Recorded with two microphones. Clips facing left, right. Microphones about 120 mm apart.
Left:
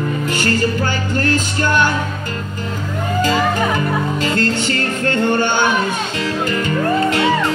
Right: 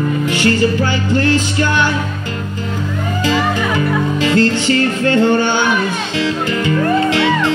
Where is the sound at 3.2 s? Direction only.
45° left (ahead or behind).